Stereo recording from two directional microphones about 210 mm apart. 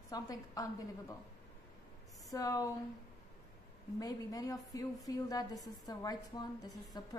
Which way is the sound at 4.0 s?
15° left (ahead or behind).